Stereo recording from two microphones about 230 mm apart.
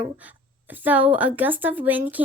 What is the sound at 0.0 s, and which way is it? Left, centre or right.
A woman's voice, centre.